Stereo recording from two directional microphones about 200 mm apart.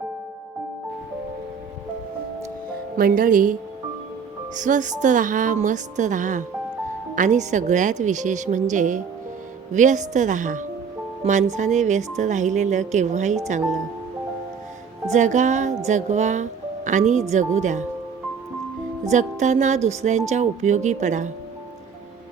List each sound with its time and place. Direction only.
3.0 s a woman's voice: 45° right (ahead or behind)
4.5 s a woman's voice: 40° right (ahead or behind)
15.1 s a woman's voice: 35° right (ahead or behind)
19.1 s a woman's voice: 35° right (ahead or behind)